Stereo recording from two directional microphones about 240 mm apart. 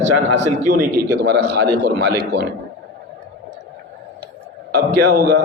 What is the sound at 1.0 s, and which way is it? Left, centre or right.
A man's voice, right.